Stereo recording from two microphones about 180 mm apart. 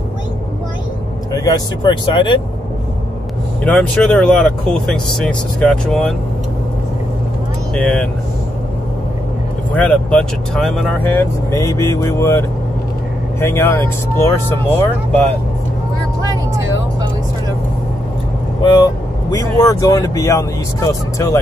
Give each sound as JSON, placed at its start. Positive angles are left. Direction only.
{"t": 1.3, "sound": "speech", "side_deg": 20}
{"t": 3.6, "sound": "speech", "side_deg": 5}
{"t": 7.7, "sound": "speech", "side_deg": 5}
{"t": 9.8, "sound": "speech", "side_deg": 5}
{"t": 11.1, "sound": "speech", "side_deg": 15}
{"t": 18.6, "sound": "speech", "side_deg": 25}